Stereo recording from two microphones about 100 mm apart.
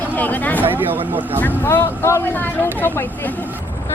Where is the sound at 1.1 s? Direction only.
15° right (ahead or behind).